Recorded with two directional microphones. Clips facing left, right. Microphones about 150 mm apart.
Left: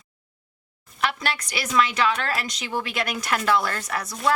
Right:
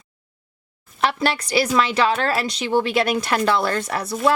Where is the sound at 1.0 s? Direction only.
30° right (ahead or behind).